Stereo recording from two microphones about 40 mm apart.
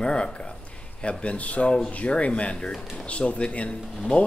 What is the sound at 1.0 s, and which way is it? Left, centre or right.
Speech, left.